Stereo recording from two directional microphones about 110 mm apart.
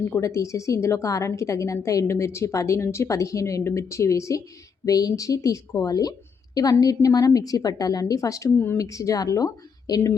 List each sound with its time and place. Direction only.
0.0 s a woman's voice: 25° left (ahead or behind)